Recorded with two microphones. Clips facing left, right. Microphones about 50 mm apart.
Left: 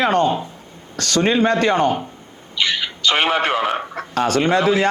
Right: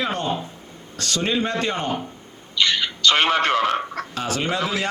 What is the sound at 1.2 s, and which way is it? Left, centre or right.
Speech, left.